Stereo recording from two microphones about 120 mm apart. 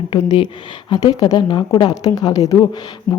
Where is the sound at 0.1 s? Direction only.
40° left (ahead or behind).